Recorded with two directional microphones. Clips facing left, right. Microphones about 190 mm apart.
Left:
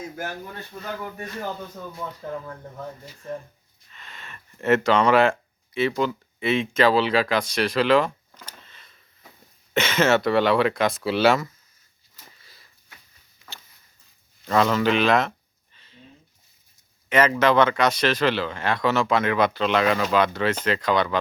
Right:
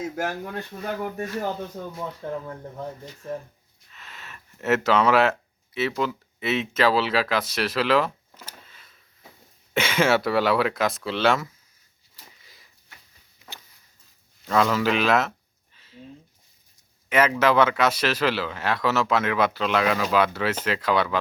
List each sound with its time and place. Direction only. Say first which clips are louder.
0.2 s speech: right 4 dB; 70° right (ahead or behind)
3.2 s speech: even; 5° right (ahead or behind)
12.4 s sniff: even; 15° right (ahead or behind)
13.4 s a sound: right 1 dB; 20° right (ahead or behind)
14.4 s speech: left 1 dB; centre (ahead or behind)
15.7 s a sound: right 6 dB; 5° right (ahead or behind)
17.1 s speech: left 1 dB; 5° right (ahead or behind)